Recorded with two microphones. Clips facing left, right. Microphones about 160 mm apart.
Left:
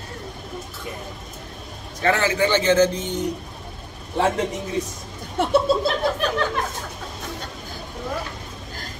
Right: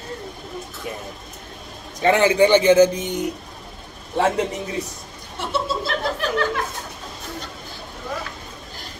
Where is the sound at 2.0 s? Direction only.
20° right (ahead or behind).